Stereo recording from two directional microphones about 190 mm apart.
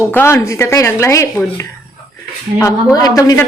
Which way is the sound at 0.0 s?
10° left (ahead or behind).